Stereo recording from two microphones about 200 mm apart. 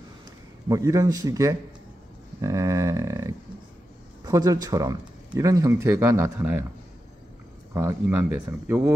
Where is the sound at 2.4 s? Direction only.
15° right (ahead or behind).